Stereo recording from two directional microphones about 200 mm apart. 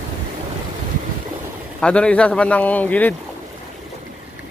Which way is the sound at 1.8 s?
5° left (ahead or behind).